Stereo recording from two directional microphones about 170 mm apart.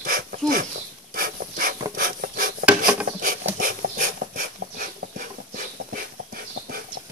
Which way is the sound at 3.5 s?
55° right (ahead or behind).